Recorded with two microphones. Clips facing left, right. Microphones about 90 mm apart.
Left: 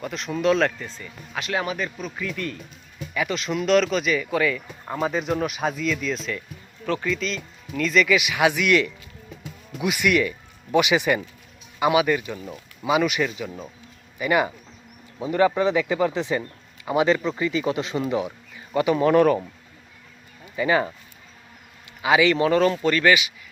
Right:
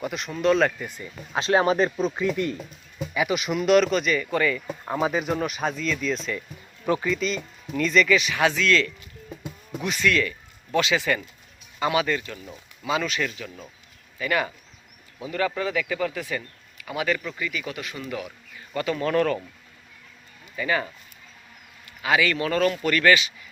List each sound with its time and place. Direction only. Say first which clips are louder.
0.0 s speech: left 1 dB; 5° right (ahead or behind)
0.9 s speech: right 1 dB; 15° right (ahead or behind)
1.3 s speech: right 6 dB; 30° right (ahead or behind)
3.0 s speech: right 2 dB; 10° right (ahead or behind)
6.8 s speech: right 2 dB; 15° right (ahead or behind)
7.1 s speech: right 1 dB; 5° right (ahead or behind); by 19.4 s 20° left (ahead or behind)
20.6 s speech: left 5 dB; 20° left (ahead or behind)
22.0 s speech: left 4 dB; 20° left (ahead or behind)